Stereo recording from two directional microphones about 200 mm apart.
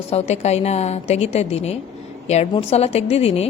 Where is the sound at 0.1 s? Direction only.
30° left (ahead or behind).